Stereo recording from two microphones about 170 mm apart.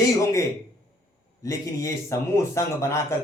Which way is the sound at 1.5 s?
20° left (ahead or behind).